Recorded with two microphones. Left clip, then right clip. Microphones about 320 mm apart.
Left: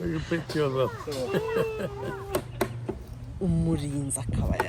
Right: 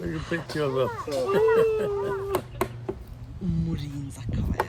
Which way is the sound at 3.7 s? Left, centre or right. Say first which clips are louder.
Left 6 dB; centre.